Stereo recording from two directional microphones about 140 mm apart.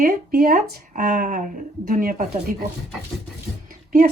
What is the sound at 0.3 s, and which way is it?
Speech, 90° right.